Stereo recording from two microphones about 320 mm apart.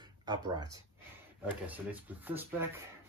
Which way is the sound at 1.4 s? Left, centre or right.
Centre.